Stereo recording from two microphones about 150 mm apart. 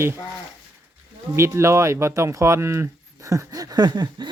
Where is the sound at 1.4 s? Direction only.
20° right (ahead or behind).